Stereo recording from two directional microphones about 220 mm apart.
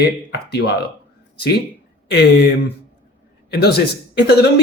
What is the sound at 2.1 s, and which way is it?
Speech, 50° left (ahead or behind).